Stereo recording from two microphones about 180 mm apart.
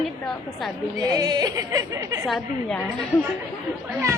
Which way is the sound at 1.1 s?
20° right (ahead or behind).